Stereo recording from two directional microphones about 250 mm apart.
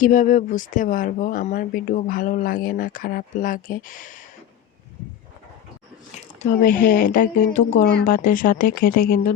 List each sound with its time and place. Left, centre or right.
0.0 s speech: left
6.4 s speech: left